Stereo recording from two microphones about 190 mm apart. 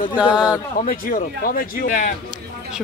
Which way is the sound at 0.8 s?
45° left (ahead or behind).